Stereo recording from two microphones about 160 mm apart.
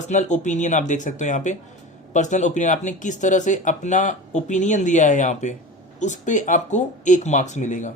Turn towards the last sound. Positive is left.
turn(degrees=50)  # may be behind; listen again after turning